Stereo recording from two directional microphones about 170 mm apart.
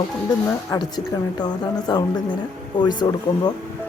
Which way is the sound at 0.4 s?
20° left (ahead or behind).